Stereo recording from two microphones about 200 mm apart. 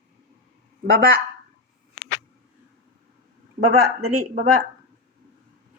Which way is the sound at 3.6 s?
90° right.